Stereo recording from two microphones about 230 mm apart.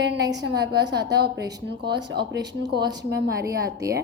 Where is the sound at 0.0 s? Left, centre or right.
Right.